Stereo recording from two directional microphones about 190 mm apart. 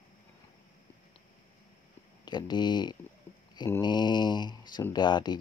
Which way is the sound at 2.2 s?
25° left (ahead or behind).